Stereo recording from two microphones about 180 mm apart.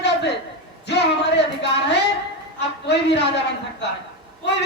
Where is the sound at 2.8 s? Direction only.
70° left (ahead or behind).